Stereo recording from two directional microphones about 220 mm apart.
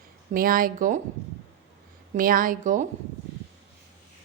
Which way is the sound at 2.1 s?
40° right (ahead or behind).